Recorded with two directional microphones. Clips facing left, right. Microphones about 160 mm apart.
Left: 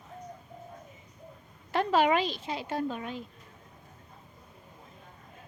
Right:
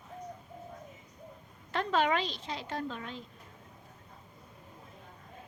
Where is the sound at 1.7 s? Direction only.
10° left (ahead or behind).